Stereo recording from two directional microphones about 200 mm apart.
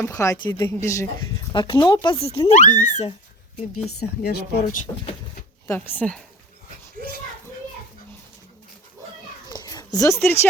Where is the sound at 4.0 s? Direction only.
50° left (ahead or behind).